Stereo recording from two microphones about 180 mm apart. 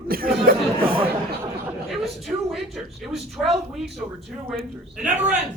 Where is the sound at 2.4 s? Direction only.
Centre (ahead or behind).